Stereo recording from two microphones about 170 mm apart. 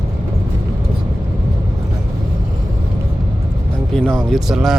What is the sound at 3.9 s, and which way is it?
Speech, 5° left (ahead or behind).